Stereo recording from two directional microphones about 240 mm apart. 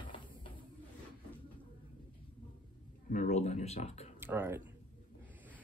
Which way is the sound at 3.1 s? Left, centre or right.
Left.